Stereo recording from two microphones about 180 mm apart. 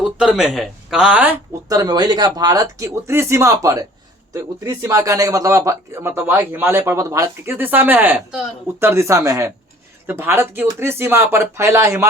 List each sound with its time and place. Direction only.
0.0 s speech: 5° right (ahead or behind)